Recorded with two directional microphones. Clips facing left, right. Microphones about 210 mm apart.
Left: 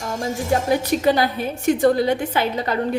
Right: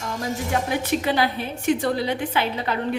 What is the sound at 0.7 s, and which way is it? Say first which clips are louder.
A woman's voice: left 6 dB; 40° left (ahead or behind).